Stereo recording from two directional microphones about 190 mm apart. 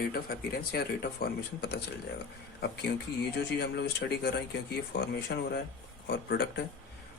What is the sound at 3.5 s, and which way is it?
A man's voice, 60° left (ahead or behind).